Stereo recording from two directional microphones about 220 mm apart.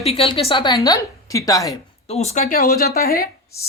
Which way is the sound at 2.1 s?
30° left (ahead or behind).